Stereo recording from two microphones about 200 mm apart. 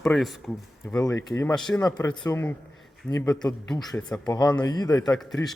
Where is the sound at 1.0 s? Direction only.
15° left (ahead or behind).